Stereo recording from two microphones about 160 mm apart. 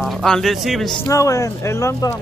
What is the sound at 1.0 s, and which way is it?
Speech, 20° left (ahead or behind).